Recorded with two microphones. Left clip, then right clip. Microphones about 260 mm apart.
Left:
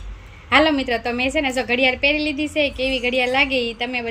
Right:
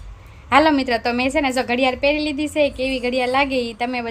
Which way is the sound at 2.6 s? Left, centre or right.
Right.